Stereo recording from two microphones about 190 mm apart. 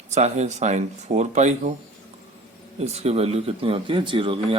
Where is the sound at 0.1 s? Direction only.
35° right (ahead or behind).